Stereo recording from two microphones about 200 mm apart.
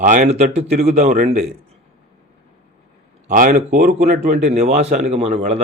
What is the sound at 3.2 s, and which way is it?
Speech, 40° right (ahead or behind).